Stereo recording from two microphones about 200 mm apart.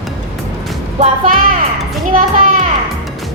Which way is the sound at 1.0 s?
40° right (ahead or behind).